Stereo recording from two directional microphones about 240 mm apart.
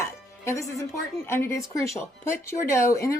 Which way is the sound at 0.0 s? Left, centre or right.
Centre.